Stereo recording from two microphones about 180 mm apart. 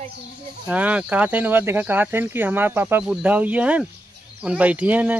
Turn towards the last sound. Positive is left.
turn(degrees=-10)  # may be behind; listen again after turning